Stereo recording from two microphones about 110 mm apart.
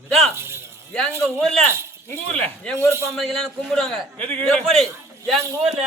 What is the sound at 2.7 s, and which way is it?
Speech, 25° right (ahead or behind).